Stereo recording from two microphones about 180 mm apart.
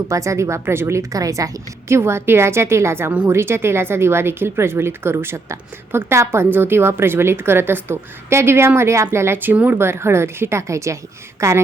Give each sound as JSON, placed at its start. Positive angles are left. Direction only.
{"t": 0.1, "sound": "a woman's voice", "side_deg": -15}